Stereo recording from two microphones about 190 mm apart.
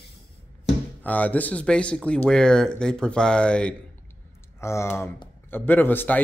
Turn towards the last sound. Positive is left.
turn(degrees=10)  # may be behind; listen again after turning